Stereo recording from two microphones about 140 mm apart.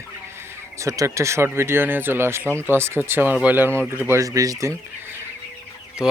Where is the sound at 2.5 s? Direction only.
15° left (ahead or behind).